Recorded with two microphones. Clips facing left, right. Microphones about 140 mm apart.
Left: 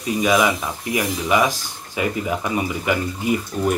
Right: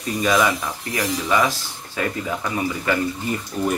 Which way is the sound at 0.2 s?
10° left (ahead or behind).